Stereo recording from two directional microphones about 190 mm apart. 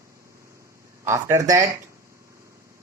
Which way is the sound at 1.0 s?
15° right (ahead or behind).